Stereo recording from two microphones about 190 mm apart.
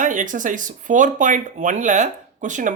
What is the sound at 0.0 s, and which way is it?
Speech, 45° right (ahead or behind).